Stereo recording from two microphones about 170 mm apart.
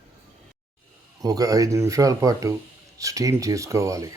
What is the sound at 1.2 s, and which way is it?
Speech, 20° right (ahead or behind).